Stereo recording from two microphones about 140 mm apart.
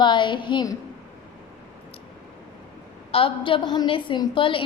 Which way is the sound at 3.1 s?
40° left (ahead or behind).